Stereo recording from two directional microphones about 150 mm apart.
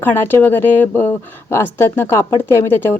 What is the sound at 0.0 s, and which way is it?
A woman's voice, 15° left (ahead or behind).